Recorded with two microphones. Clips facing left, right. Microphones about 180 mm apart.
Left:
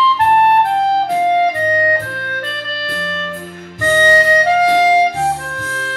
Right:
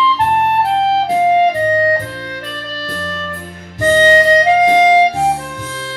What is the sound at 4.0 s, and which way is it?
Music, 25° right (ahead or behind).